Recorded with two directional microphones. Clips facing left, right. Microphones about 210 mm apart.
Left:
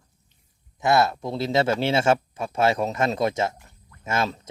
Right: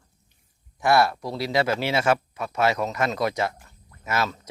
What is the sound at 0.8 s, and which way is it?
Speech, 20° left (ahead or behind).